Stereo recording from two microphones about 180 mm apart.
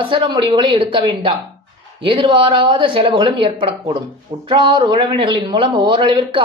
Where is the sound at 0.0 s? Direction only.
25° right (ahead or behind).